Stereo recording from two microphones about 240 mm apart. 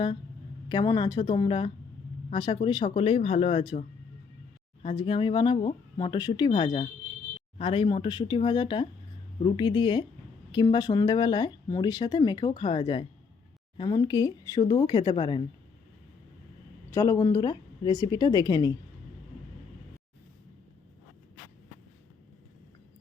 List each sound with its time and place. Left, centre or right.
0.7 s speech: centre
16.9 s speech: centre